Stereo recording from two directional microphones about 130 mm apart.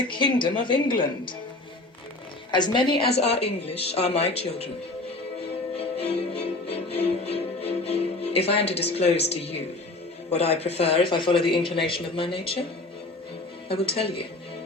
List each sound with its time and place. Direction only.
0.1 s a woman's voice: 40° left (ahead or behind)
2.5 s speech: 35° left (ahead or behind)
5.7 s music: 50° left (ahead or behind)
10.2 s speech: 50° left (ahead or behind)
13.7 s speech: 45° left (ahead or behind)